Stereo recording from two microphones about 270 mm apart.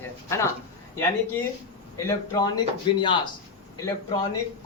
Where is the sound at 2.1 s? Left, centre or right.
Centre.